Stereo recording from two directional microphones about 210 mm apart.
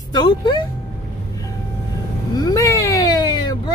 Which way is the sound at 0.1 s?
20° left (ahead or behind).